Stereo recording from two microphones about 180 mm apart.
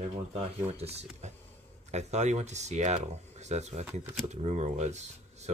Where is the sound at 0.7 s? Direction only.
35° right (ahead or behind).